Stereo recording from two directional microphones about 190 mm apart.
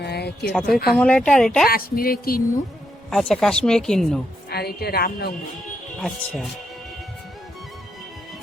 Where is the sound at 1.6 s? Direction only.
50° left (ahead or behind).